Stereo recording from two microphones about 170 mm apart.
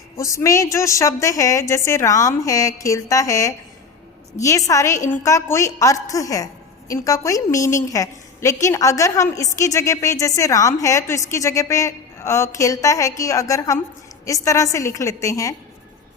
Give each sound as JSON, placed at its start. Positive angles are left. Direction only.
{"t": 0.2, "sound": "a woman's voice", "side_deg": 20}